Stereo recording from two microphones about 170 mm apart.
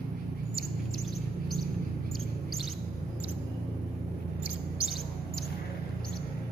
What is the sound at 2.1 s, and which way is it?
Chirp, centre (ahead or behind).